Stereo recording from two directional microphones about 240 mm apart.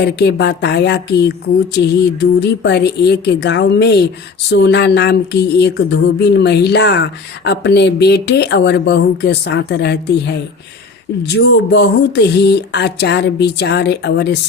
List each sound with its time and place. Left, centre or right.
0.0 s speech: left
2.4 s speech: left
11.3 s speech: left